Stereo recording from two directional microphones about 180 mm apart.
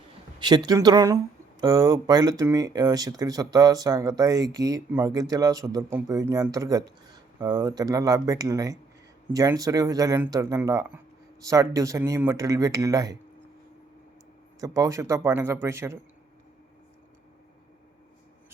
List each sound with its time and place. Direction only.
0.3 s speech: 25° right (ahead or behind)
14.6 s speech: 20° right (ahead or behind)